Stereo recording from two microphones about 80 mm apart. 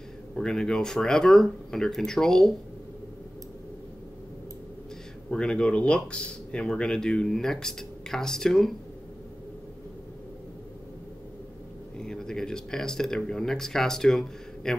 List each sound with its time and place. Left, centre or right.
0.3 s speech: centre
5.3 s speech: centre
12.0 s speech: centre